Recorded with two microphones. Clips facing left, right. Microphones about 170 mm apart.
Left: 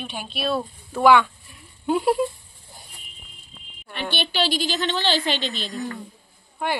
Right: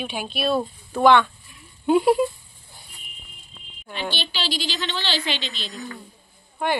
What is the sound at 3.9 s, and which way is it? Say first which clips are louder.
A woman's voice: left 2 dB; 60° left (ahead or behind).